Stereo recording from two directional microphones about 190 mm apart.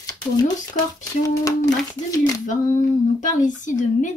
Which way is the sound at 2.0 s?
15° left (ahead or behind).